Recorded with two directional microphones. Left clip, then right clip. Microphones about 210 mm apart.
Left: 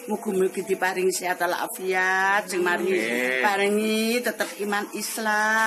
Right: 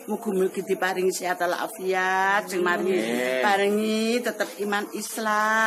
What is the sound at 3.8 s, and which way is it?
Speech, 20° right (ahead or behind).